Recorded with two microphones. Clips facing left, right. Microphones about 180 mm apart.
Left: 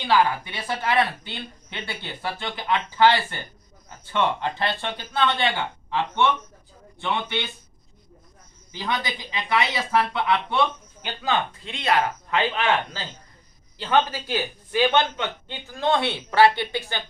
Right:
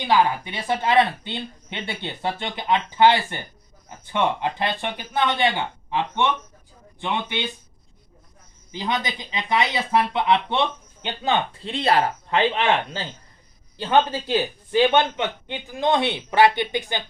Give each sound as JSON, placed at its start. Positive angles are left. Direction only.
{"t": 0.0, "sound": "a man's voice", "side_deg": -15}
{"t": 8.7, "sound": "a man's voice", "side_deg": -20}